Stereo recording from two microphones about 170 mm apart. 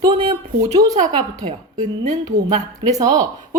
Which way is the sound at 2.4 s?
20° right (ahead or behind).